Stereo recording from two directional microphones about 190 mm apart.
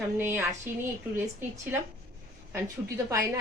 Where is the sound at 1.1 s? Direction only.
10° right (ahead or behind).